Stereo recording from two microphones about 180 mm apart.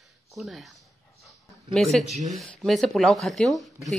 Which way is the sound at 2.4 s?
Centre (ahead or behind).